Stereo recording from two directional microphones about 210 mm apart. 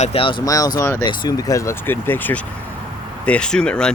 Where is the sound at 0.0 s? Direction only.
25° left (ahead or behind).